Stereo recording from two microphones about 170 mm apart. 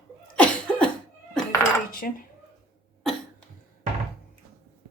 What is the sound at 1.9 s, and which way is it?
Cutlery, 55° left (ahead or behind).